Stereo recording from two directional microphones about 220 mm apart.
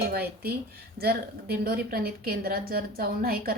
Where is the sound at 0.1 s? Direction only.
45° right (ahead or behind).